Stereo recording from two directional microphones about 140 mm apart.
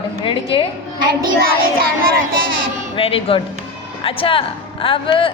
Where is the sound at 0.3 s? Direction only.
40° left (ahead or behind).